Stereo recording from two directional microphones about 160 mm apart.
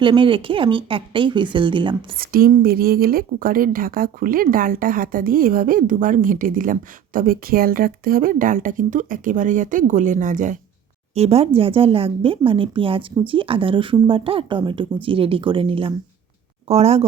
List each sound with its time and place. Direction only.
0.0 s speech: 30° right (ahead or behind)
2.1 s a woman's voice: 70° right (ahead or behind); by 10.6 s 50° right (ahead or behind)
11.1 s speech: 40° right (ahead or behind)